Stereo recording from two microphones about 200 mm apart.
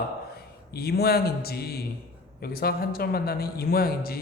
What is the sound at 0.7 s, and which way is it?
Speech, 50° left (ahead or behind).